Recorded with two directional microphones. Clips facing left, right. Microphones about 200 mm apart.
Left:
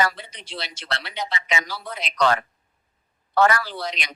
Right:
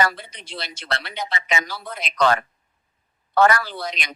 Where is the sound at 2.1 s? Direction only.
50° right (ahead or behind).